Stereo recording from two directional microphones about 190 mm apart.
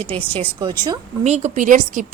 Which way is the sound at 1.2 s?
35° right (ahead or behind).